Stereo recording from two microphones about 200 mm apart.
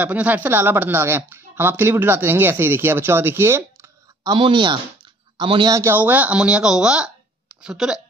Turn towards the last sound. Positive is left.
turn(degrees=-5)  # may be behind; listen again after turning